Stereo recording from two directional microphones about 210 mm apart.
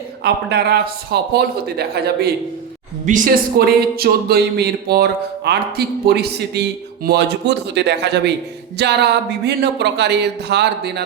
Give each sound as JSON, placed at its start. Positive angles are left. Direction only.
{"t": 0.2, "sound": "speech", "side_deg": -50}
{"t": 3.1, "sound": "speech", "side_deg": -35}
{"t": 3.6, "sound": "speech", "side_deg": -45}